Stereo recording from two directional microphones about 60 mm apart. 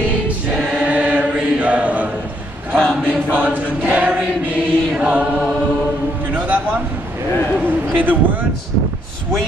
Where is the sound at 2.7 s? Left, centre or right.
Centre.